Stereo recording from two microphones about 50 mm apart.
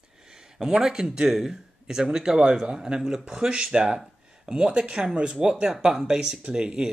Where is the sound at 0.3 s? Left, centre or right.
Centre.